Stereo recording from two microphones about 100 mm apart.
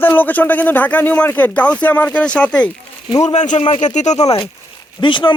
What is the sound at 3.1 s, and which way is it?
Speech, 45° left (ahead or behind).